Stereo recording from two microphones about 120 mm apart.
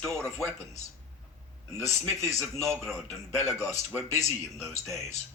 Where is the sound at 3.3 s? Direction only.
25° left (ahead or behind).